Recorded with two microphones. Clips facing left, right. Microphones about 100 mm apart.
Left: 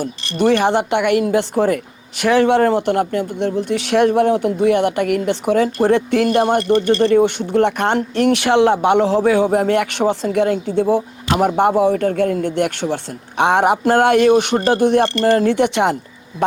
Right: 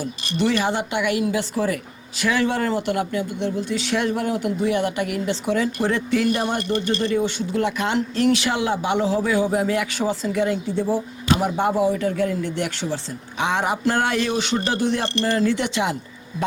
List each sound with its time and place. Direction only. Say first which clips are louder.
0.3 s a man's voice: left 7 dB; 55° left (ahead or behind)